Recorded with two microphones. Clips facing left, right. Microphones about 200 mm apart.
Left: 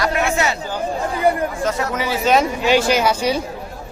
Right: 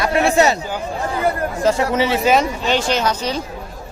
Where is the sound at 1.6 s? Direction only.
30° right (ahead or behind).